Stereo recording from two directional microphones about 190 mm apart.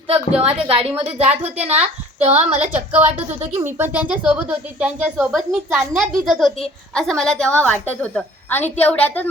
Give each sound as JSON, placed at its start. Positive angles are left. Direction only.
{"t": 0.1, "sound": "speech", "side_deg": -30}
{"t": 1.3, "sound": "a woman's voice", "side_deg": -10}
{"t": 1.6, "sound": "speech", "side_deg": -35}
{"t": 2.6, "sound": "a woman's voice", "side_deg": -5}